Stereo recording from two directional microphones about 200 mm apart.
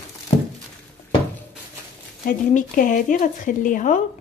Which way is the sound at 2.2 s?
45° left (ahead or behind).